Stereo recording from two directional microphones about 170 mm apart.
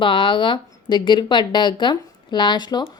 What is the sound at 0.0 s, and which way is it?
Speech, 30° left (ahead or behind).